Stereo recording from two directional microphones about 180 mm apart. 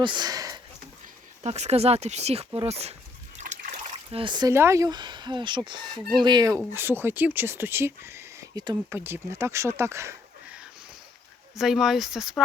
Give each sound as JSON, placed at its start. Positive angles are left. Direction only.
{"t": 0.0, "sound": "a sound", "side_deg": -25}
{"t": 1.5, "sound": "speech", "side_deg": -35}
{"t": 6.7, "sound": "speech", "side_deg": -10}
{"t": 11.5, "sound": "speech", "side_deg": 0}